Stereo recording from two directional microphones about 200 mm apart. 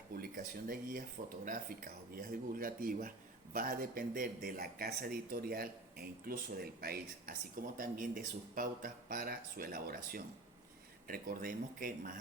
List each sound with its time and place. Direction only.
0.2 s speech: 45° right (ahead or behind)